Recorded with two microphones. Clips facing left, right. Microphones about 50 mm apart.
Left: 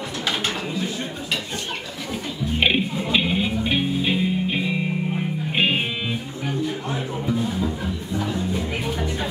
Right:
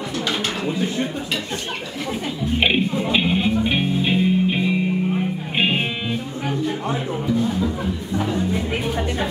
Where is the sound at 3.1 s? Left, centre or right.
Centre.